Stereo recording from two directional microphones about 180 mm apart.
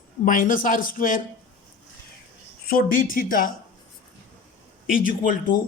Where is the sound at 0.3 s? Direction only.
50° left (ahead or behind).